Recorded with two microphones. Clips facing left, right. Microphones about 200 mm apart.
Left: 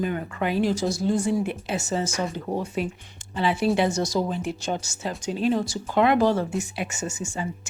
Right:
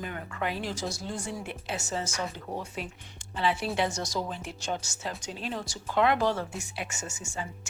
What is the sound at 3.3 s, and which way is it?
Speech, 10° left (ahead or behind).